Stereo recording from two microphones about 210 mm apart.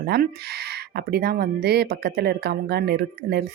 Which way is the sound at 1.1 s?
45° right (ahead or behind).